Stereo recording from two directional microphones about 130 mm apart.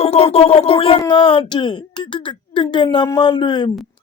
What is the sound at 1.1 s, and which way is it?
Speech, 40° left (ahead or behind).